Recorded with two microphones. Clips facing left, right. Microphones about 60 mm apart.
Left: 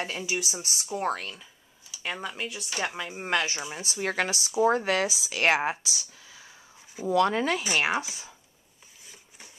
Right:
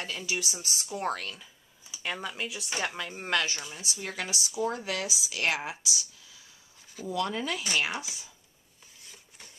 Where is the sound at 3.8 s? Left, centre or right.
Left.